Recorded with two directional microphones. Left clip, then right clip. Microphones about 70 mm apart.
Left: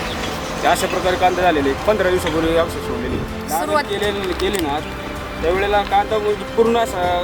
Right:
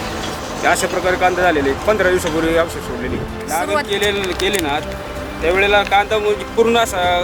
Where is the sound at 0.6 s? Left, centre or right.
Centre.